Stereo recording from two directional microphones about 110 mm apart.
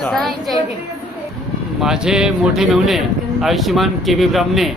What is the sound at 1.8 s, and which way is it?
Speech, 5° right (ahead or behind).